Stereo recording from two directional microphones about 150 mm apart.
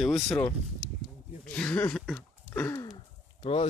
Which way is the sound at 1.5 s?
10° left (ahead or behind).